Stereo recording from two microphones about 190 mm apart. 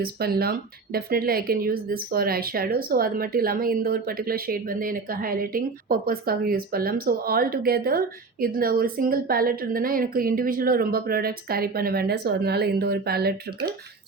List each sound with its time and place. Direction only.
0.0 s speech: 55° right (ahead or behind)